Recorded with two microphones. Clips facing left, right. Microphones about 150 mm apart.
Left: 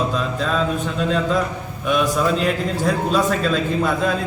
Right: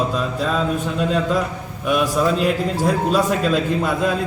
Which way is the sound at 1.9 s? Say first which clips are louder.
Right 1 dB; 5° right (ahead or behind).